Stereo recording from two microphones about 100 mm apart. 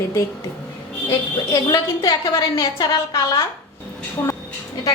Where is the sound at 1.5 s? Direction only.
40° left (ahead or behind).